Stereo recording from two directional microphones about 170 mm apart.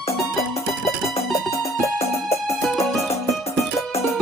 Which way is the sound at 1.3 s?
20° left (ahead or behind).